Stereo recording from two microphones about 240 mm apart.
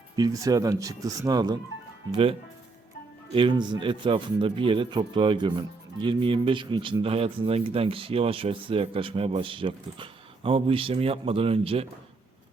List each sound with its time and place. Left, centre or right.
0.2 s speech: centre
3.3 s speech: centre